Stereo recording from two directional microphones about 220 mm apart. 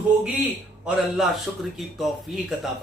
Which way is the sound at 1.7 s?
Centre (ahead or behind).